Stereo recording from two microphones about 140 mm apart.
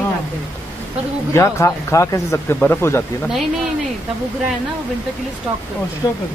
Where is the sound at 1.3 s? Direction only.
20° left (ahead or behind).